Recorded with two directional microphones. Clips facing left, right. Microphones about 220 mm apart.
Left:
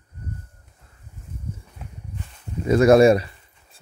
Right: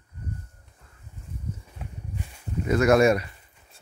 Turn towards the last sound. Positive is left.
turn(degrees=30)  # may be behind; listen again after turning